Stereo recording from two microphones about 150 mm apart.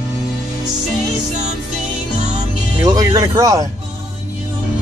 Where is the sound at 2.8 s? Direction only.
25° right (ahead or behind).